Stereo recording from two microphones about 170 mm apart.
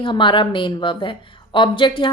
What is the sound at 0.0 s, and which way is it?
A woman's voice, 30° left (ahead or behind).